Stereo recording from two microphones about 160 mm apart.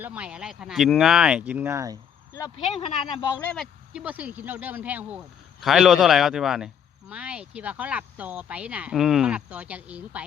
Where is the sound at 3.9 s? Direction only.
5° right (ahead or behind).